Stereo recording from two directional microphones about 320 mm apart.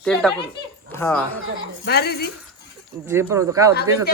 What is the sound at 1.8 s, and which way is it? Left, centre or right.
Speech, left.